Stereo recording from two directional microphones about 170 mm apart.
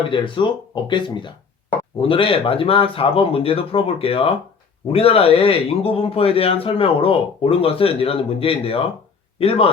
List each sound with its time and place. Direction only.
0.1 s speech: 30° left (ahead or behind)